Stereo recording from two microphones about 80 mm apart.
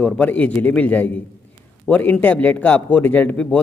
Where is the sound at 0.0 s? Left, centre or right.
Centre.